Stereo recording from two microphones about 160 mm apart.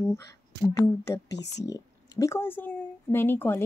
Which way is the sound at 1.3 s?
90° left.